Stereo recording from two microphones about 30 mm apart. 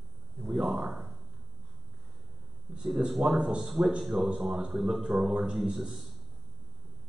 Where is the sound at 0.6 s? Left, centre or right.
Centre.